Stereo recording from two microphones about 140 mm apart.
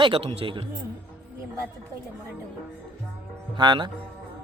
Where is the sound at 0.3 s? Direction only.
40° right (ahead or behind).